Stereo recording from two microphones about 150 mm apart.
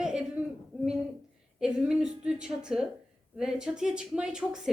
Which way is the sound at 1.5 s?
5° right (ahead or behind).